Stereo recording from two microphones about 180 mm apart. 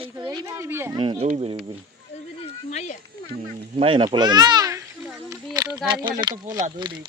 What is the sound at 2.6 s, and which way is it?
Speech, 40° left (ahead or behind).